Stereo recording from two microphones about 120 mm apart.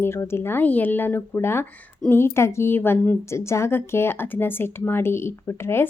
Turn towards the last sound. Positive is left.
turn(degrees=20)  # may be behind; listen again after turning